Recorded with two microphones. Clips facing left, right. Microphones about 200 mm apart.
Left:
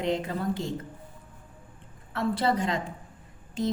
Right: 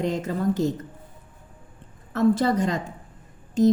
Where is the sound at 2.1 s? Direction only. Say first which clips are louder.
Right 6 dB; 45° right (ahead or behind).